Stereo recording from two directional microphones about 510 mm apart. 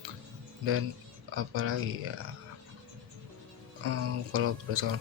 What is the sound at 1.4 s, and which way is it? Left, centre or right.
Speech, right.